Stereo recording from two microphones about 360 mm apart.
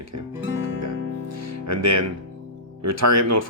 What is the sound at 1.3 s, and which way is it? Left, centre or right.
Music, right.